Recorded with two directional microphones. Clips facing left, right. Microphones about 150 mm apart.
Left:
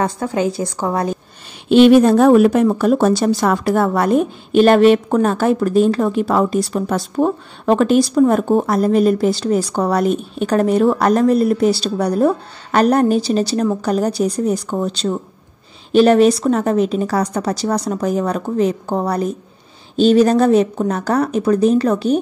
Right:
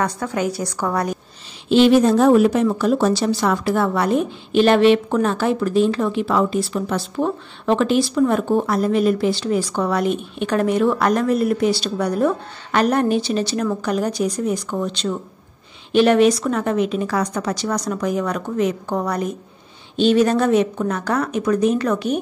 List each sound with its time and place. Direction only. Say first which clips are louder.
0.0 s a woman's voice: left 3 dB; 25° left (ahead or behind)
1.7 s a woman's voice: left 4 dB; 55° left (ahead or behind); by 22.2 s 30° left (ahead or behind)